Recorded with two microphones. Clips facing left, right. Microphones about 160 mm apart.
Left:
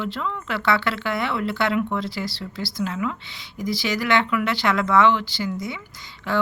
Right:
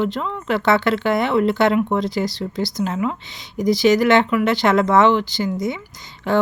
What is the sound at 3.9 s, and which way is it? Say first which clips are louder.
Speech: right 4 dB; 45° right (ahead or behind).